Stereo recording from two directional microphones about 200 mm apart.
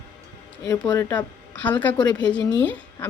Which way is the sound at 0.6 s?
15° left (ahead or behind).